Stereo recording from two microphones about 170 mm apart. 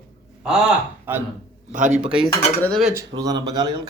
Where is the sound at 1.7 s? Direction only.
45° right (ahead or behind).